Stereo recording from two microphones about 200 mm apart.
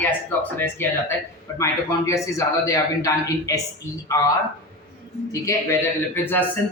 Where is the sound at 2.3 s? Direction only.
15° left (ahead or behind).